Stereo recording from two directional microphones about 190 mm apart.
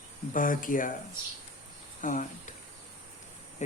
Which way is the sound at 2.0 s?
40° left (ahead or behind).